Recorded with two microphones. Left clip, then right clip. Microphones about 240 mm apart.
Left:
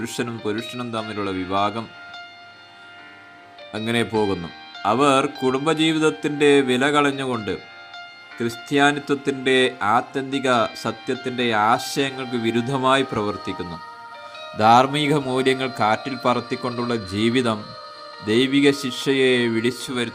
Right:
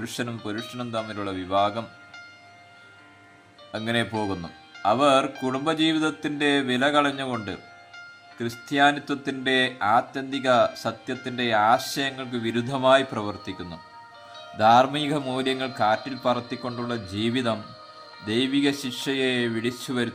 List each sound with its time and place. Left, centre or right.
0.0 s speech: centre
3.7 s speech: centre